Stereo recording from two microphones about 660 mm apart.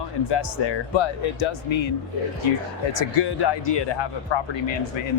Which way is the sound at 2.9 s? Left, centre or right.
Left.